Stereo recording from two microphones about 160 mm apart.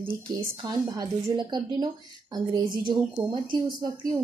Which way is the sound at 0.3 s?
25° right (ahead or behind).